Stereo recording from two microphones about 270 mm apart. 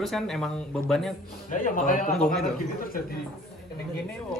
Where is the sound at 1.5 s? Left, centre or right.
Left.